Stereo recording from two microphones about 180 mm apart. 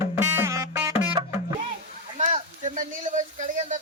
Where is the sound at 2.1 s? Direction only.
40° right (ahead or behind).